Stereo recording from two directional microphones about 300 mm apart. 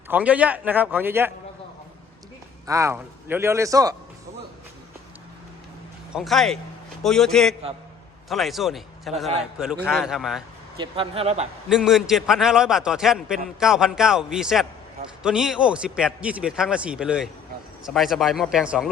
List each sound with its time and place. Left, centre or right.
0.1 s a man's voice: centre
2.6 s a man's voice: centre
6.1 s a man's voice: centre
10.8 s speech: centre
11.7 s a man's voice: centre